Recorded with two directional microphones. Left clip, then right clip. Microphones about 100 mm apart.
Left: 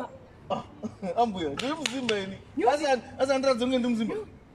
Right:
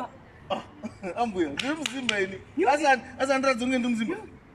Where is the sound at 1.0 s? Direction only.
35° left (ahead or behind).